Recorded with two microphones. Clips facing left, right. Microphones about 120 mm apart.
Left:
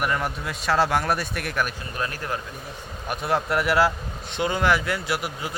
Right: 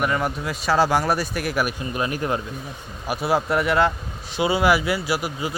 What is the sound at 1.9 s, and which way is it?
Speech, 15° right (ahead or behind).